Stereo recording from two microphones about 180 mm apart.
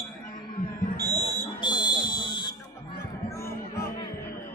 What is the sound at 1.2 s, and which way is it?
Fire alarm, 25° left (ahead or behind).